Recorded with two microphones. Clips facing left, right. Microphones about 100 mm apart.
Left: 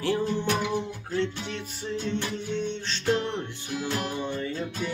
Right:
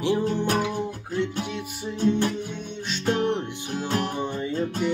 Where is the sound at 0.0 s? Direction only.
20° right (ahead or behind).